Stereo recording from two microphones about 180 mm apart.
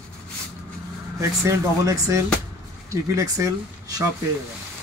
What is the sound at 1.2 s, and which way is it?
Speech, 15° right (ahead or behind).